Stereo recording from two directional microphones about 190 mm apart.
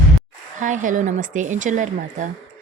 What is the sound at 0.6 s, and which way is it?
Speech, 40° right (ahead or behind).